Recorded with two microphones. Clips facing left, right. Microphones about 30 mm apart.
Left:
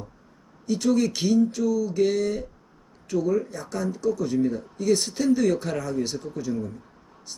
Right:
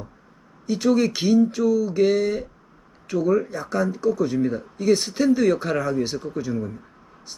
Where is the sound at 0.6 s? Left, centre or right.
Centre.